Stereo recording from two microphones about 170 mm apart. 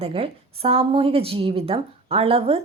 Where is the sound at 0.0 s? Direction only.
35° right (ahead or behind).